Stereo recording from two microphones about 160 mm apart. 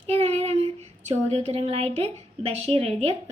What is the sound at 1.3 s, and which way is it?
A woman's voice, 40° right (ahead or behind).